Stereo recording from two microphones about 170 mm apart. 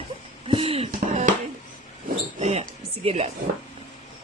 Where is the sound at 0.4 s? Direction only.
30° right (ahead or behind).